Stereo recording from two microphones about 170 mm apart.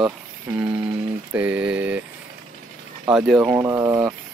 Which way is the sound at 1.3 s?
10° right (ahead or behind).